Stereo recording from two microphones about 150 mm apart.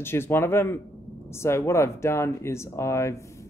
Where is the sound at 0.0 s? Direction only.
15° left (ahead or behind).